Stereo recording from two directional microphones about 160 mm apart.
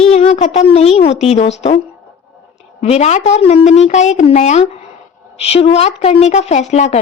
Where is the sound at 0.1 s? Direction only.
40° left (ahead or behind).